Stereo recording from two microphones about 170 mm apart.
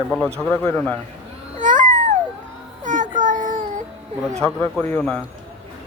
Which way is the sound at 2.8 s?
50° right (ahead or behind).